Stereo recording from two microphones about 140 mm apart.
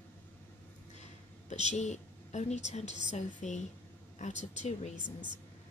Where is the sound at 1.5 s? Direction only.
55° left (ahead or behind).